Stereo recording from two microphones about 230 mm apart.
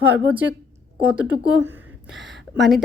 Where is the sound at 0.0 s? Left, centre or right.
Centre.